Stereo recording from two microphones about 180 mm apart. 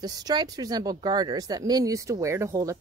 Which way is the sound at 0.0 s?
20° right (ahead or behind).